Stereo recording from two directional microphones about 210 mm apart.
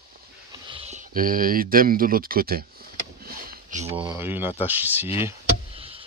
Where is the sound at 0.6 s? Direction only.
25° right (ahead or behind).